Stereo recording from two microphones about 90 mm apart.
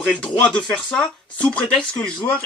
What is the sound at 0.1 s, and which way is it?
Speech, 10° left (ahead or behind).